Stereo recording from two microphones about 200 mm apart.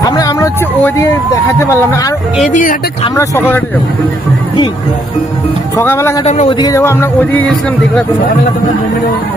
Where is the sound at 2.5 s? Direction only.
40° left (ahead or behind).